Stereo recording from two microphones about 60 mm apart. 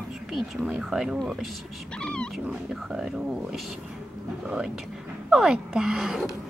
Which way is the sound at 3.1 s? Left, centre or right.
Centre.